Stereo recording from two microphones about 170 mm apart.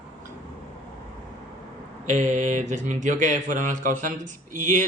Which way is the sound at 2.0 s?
45° right (ahead or behind).